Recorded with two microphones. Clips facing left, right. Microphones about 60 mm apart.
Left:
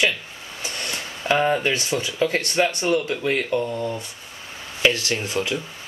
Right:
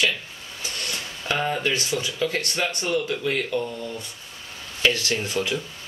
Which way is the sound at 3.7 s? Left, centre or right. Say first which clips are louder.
Left 6 dB; left.